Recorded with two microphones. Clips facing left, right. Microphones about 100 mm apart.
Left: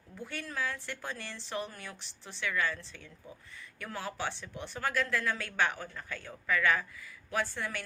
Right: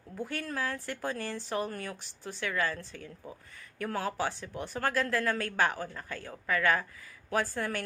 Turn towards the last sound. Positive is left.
turn(degrees=-40)  # may be behind; listen again after turning